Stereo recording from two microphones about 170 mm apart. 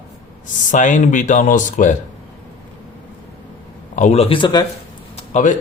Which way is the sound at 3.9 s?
40° left (ahead or behind).